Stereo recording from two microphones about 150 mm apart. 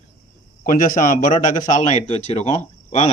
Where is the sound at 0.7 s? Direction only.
65° left (ahead or behind).